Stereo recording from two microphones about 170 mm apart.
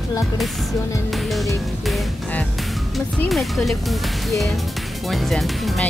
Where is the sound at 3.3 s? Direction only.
Centre (ahead or behind).